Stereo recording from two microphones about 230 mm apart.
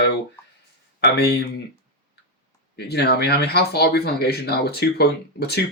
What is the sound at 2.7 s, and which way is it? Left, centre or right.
Speech, left.